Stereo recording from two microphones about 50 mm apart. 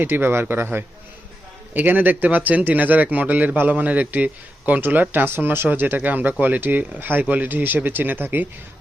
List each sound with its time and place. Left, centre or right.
0.0 s a man's voice: right